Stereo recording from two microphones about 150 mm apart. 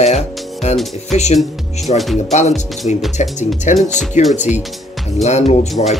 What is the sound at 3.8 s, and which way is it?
Speech, 5° left (ahead or behind).